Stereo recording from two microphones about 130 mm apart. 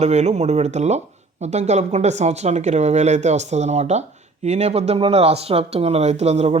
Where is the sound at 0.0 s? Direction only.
60° right (ahead or behind).